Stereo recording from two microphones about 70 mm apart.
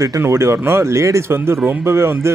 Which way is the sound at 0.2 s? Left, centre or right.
Right.